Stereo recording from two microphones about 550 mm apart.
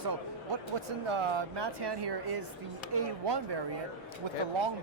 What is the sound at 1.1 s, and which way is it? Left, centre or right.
Speech, right.